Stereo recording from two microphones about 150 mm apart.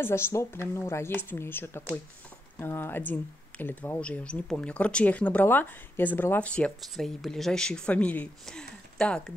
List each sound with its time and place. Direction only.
0.0 s speech: 15° left (ahead or behind)